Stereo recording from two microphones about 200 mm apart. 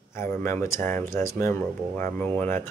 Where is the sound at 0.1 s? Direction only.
10° left (ahead or behind).